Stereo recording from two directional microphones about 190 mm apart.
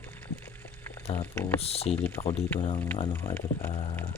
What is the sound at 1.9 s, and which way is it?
Speech, 10° left (ahead or behind).